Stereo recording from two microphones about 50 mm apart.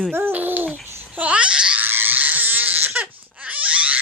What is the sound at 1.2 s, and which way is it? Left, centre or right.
Babbling, right.